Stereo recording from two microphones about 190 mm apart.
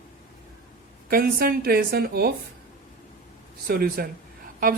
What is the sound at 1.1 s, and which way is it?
Speech, 50° right (ahead or behind).